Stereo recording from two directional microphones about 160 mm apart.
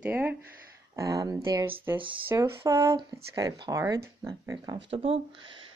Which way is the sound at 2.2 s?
15° right (ahead or behind).